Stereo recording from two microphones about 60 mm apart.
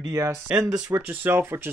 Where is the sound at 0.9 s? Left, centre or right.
Right.